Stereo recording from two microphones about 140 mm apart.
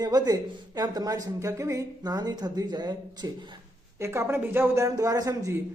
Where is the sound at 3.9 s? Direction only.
20° right (ahead or behind).